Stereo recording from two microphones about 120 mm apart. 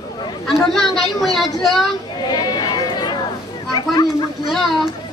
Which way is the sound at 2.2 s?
35° left (ahead or behind).